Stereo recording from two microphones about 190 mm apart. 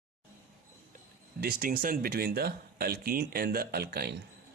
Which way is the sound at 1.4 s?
50° right (ahead or behind).